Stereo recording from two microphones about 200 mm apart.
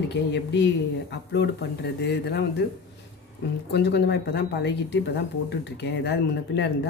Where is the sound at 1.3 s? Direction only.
55° left (ahead or behind).